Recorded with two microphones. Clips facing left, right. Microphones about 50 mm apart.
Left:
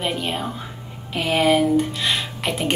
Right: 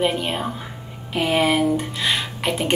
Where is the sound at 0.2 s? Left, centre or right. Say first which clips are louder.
Right 1 dB; centre.